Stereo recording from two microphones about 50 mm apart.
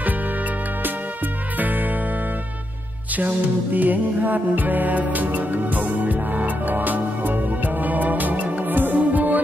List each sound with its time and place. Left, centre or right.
3.2 s music: right